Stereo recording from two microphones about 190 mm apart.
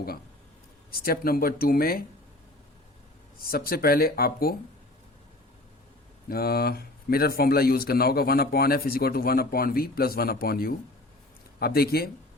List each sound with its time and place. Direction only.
0.9 s speech: 50° left (ahead or behind)
3.3 s speech: 50° left (ahead or behind)
6.2 s speech: 55° left (ahead or behind)